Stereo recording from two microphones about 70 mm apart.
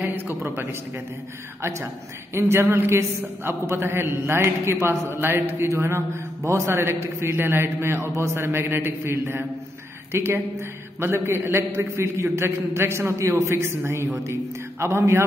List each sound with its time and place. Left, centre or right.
0.0 s speech: right
1.6 s a man's voice: right